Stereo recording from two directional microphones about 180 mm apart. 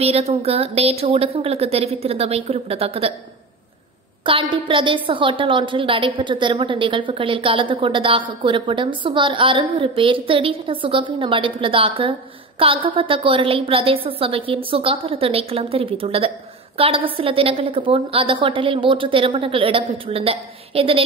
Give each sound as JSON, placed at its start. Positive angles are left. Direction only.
{"t": 0.0, "sound": "a woman's voice", "side_deg": -35}
{"t": 4.3, "sound": "a woman's voice", "side_deg": -30}